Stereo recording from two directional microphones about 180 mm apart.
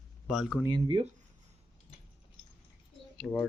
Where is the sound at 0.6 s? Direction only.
25° right (ahead or behind).